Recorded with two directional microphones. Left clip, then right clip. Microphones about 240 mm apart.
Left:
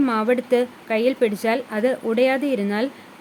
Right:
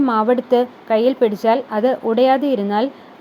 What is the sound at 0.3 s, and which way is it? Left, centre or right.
A woman's voice, centre.